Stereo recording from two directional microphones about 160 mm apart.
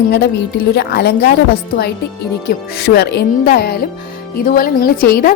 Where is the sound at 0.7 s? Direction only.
90° left.